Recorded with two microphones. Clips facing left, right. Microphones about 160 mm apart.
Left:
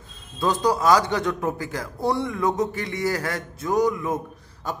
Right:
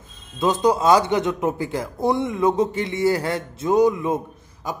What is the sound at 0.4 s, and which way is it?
Speech, 20° right (ahead or behind).